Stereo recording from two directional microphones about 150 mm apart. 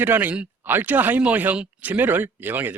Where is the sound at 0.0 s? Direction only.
10° right (ahead or behind).